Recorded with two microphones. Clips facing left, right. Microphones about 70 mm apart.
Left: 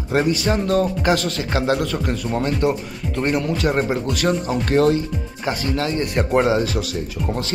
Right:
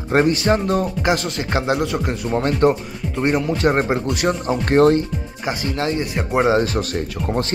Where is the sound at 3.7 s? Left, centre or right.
Right.